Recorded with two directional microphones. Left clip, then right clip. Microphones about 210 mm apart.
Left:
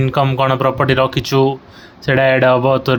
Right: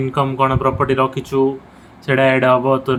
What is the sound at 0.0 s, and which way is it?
Speech, 40° left (ahead or behind).